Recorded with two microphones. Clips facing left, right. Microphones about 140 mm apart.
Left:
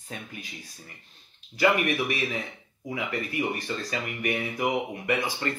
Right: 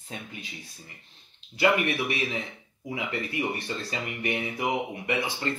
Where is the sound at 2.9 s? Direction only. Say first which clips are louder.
Left 1 dB; 25° right (ahead or behind).